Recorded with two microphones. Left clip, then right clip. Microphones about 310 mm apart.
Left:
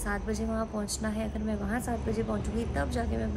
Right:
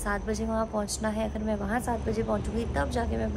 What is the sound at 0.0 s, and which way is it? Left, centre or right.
A woman's voice, centre.